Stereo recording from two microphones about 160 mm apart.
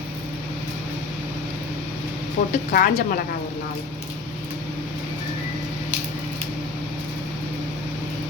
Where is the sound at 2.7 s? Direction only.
65° left (ahead or behind).